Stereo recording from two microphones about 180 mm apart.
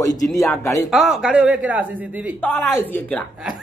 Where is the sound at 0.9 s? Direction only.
Centre (ahead or behind).